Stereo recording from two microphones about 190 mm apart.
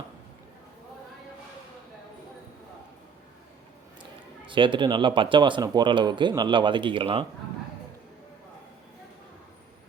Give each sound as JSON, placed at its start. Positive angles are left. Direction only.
{"t": 4.4, "sound": "speech", "side_deg": -25}